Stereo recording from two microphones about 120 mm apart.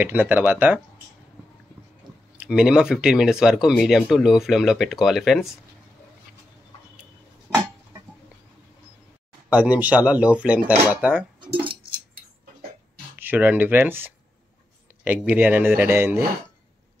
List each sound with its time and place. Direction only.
0.0 s speech: 15° right (ahead or behind)
2.3 s speech: 10° right (ahead or behind)
9.5 s speech: 15° right (ahead or behind)
13.2 s speech: 15° right (ahead or behind)